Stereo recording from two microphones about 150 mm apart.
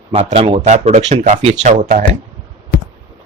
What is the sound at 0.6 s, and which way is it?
Speech, 50° right (ahead or behind).